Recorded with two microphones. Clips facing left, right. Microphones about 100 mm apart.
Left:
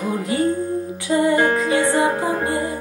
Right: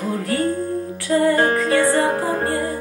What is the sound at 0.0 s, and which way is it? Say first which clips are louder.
Music: left 1 dB; 15° left (ahead or behind).